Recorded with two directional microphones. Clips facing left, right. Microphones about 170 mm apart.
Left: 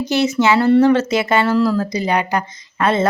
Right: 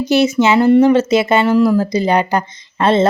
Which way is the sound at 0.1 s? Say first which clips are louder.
Right 3 dB; 20° right (ahead or behind).